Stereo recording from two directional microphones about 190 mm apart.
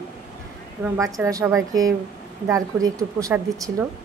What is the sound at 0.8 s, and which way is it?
Speech, 15° right (ahead or behind).